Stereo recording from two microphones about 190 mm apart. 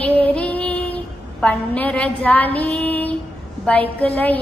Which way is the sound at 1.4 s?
5° left (ahead or behind).